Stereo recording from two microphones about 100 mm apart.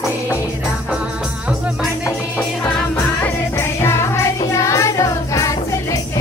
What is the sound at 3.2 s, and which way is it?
Music, 25° left (ahead or behind).